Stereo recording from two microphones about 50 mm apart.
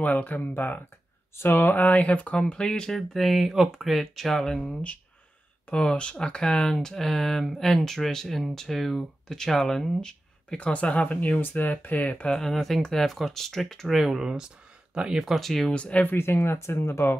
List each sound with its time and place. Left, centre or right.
0.0 s speech: left
1.3 s speech: left; by 3.0 s centre
3.0 s speech: centre
5.7 s speech: centre
10.7 s speech: left
12.3 s speech: centre
13.9 s speech: centre
15.4 s speech: centre
15.7 s speech: left
16.0 s speech: left
16.5 s speech: left